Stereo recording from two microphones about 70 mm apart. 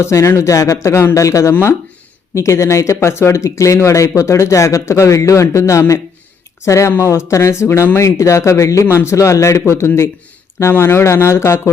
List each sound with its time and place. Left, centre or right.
0.0 s speech: left